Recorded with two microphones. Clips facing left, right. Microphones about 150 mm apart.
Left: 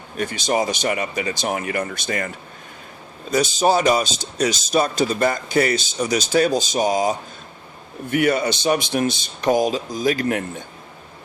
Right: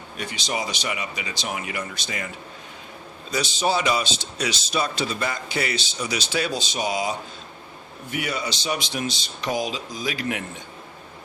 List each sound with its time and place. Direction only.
0.2 s a man's voice: 50° left (ahead or behind)